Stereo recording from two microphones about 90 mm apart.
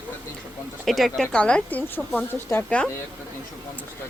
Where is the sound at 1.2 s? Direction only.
10° left (ahead or behind).